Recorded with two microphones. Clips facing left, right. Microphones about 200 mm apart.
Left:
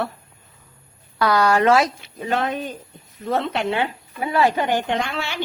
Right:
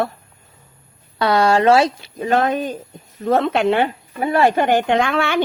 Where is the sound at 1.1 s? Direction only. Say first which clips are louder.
Right 2 dB; 25° right (ahead or behind).